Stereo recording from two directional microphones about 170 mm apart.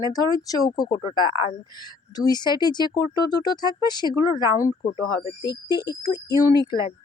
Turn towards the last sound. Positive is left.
turn(degrees=25)  # may be behind; listen again after turning